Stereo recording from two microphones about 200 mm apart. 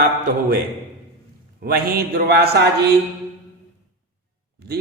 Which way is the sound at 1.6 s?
50° right (ahead or behind).